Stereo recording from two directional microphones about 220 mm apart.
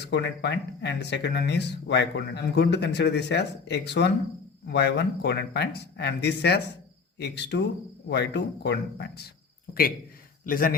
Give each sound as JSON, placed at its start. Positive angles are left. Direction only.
{"t": 0.0, "sound": "speech", "side_deg": 50}
{"t": 10.4, "sound": "a man's voice", "side_deg": 40}